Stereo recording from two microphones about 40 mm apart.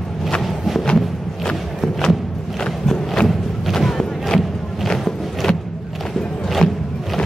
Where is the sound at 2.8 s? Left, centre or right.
Centre.